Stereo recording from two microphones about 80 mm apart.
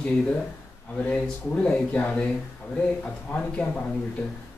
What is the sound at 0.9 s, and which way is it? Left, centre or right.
Speech, centre.